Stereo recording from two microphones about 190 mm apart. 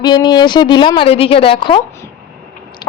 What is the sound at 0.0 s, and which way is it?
A woman's voice, 20° left (ahead or behind).